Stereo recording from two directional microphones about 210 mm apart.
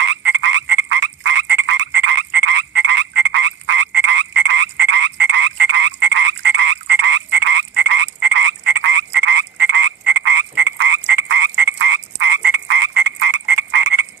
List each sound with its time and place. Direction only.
0.0 s frog: 55° right (ahead or behind)